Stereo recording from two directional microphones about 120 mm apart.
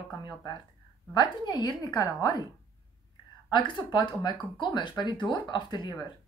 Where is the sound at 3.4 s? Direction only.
40° left (ahead or behind).